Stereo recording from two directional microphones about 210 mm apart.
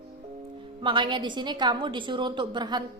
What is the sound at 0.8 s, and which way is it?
Speech, 25° right (ahead or behind).